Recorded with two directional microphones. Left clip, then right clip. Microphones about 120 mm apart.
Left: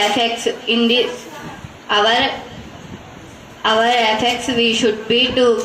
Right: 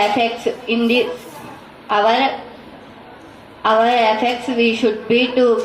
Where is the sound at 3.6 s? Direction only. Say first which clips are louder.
Right 1 dB; 25° right (ahead or behind).